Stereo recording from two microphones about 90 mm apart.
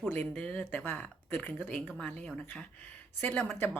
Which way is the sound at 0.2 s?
10° left (ahead or behind).